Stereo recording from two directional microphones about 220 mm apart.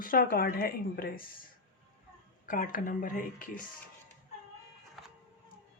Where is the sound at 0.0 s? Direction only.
40° left (ahead or behind).